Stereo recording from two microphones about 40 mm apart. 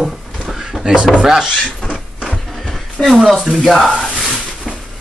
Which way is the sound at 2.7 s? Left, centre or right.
Centre.